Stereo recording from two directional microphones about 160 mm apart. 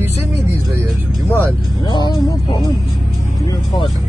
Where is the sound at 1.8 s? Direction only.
25° left (ahead or behind).